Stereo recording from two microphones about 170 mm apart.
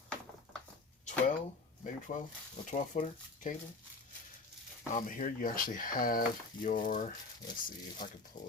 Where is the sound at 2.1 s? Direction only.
45° left (ahead or behind).